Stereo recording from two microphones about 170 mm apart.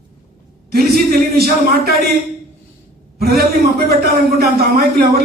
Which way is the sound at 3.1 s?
65° right (ahead or behind).